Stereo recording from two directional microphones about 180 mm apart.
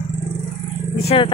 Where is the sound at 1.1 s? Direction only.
30° left (ahead or behind).